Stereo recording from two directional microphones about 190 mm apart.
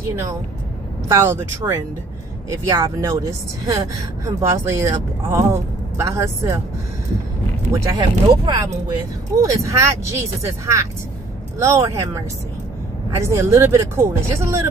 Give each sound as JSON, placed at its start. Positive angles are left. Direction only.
{"t": 1.0, "sound": "speech", "side_deg": -15}
{"t": 4.3, "sound": "speech", "side_deg": -15}
{"t": 7.8, "sound": "speech", "side_deg": -20}